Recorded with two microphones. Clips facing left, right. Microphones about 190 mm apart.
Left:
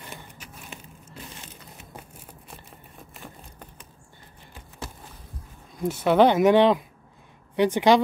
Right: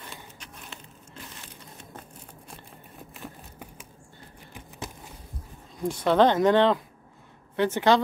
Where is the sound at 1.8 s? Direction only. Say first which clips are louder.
Even; 10° left (ahead or behind).